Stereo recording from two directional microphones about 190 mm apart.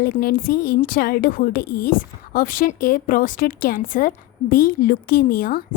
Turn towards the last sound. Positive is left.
turn(degrees=50)  # may be behind; listen again after turning